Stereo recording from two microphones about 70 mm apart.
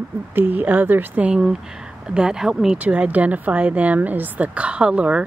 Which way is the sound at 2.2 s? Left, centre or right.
Centre.